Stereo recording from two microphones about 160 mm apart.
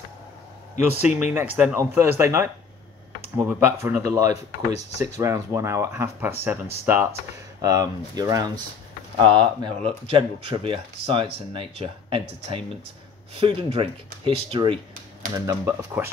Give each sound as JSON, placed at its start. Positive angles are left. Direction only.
{"t": 1.0, "sound": "speech", "side_deg": -10}
{"t": 4.7, "sound": "speech", "side_deg": 45}
{"t": 5.1, "sound": "speech", "side_deg": -20}
{"t": 15.2, "sound": "speech", "side_deg": -20}